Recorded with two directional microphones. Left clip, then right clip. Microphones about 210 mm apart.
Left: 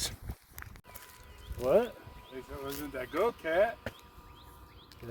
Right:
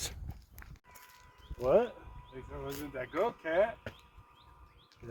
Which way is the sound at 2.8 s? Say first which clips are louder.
Left 2 dB; 45° left (ahead or behind).